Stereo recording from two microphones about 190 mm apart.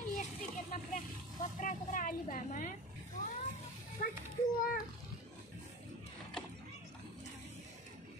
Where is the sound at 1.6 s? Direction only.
45° left (ahead or behind).